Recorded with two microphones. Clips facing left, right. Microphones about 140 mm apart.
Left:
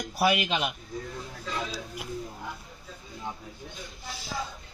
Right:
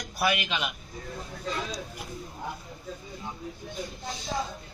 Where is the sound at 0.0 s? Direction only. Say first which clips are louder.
Left 3 dB; 25° left (ahead or behind).